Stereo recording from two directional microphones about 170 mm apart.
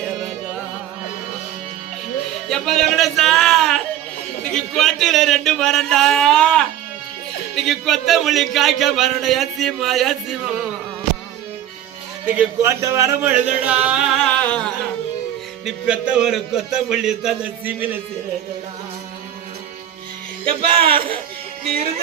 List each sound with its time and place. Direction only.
2.5 s a sound: centre (ahead or behind)
4.5 s speech: centre (ahead or behind)
12.2 s music: 10° right (ahead or behind)
14.4 s a sound: 5° left (ahead or behind)
15.6 s speech: 5° right (ahead or behind)
20.4 s speech: 30° right (ahead or behind)